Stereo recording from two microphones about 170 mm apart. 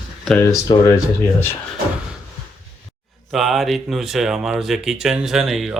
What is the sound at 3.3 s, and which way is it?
Speech, centre (ahead or behind).